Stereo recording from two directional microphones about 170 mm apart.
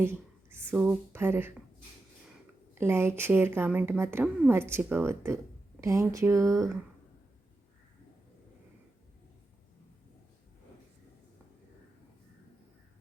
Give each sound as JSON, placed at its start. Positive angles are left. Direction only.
{"t": 0.0, "sound": "speech", "side_deg": -15}
{"t": 2.7, "sound": "a woman's voice", "side_deg": -15}